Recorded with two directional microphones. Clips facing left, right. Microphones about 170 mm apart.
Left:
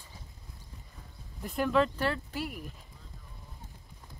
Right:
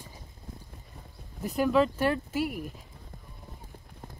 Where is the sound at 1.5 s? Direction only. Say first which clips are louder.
Right 3 dB; 5° right (ahead or behind).